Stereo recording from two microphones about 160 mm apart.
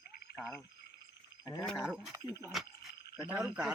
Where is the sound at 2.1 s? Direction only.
20° right (ahead or behind).